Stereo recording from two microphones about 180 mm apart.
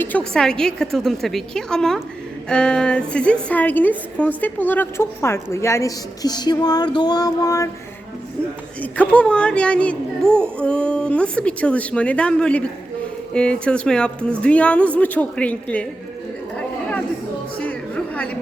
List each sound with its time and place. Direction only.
0.0 s a woman's voice: 5° left (ahead or behind)
8.8 s a woman's voice: 5° left (ahead or behind)
17.6 s music: 10° left (ahead or behind)